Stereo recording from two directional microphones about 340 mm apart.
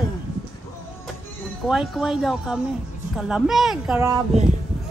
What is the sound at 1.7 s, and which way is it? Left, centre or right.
Speech, centre.